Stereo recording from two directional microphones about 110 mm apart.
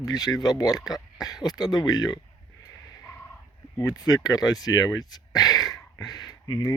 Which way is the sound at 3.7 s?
35° left (ahead or behind).